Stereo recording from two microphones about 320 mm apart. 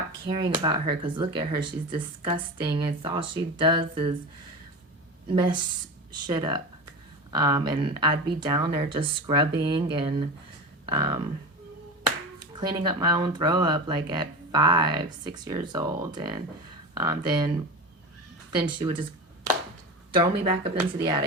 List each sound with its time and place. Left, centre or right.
0.3 s speech: centre
5.3 s speech: centre
12.5 s speech: centre
18.8 s speech: centre
20.1 s speech: centre